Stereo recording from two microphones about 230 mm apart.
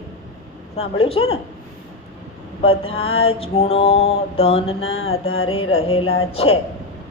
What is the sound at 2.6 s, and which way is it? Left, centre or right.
A woman's voice, left.